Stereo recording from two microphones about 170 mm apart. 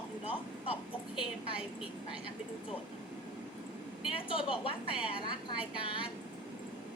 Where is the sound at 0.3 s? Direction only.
30° left (ahead or behind).